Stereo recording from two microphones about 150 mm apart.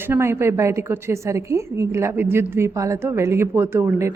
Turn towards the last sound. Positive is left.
turn(degrees=-20)  # may be behind; listen again after turning